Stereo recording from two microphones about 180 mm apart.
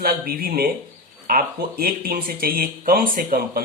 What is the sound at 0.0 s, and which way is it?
Speech, 55° right (ahead or behind).